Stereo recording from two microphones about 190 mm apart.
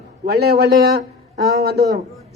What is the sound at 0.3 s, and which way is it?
Speech, 55° right (ahead or behind).